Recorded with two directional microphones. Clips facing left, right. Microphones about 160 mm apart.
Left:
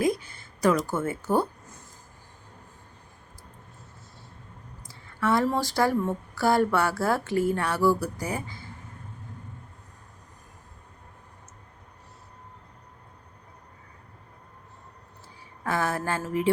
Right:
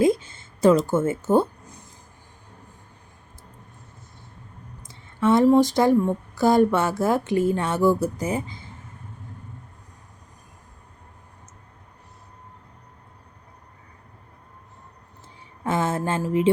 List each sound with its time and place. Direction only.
0.0 s a sound: 25° right (ahead or behind)
4.8 s speech: 20° right (ahead or behind)
15.6 s speech: 20° right (ahead or behind)